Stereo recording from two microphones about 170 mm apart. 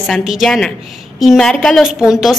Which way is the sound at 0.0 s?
Centre (ahead or behind).